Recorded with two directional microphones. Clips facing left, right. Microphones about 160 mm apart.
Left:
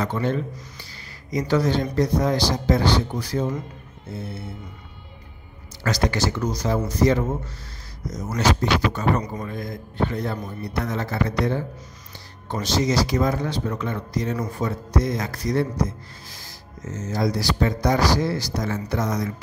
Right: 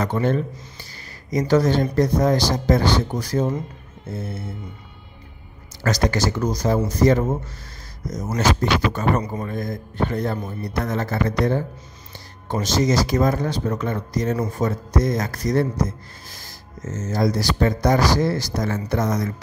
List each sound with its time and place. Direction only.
0.0 s rub: 45° right (ahead or behind)
5.9 s rub: 45° right (ahead or behind)
8.4 s rub: 45° right (ahead or behind)
12.6 s rub: 45° right (ahead or behind)